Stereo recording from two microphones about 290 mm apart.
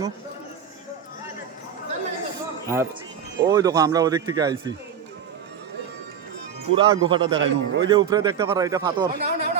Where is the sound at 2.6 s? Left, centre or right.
Centre.